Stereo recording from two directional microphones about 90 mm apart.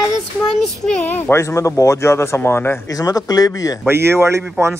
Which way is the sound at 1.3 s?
35° left (ahead or behind).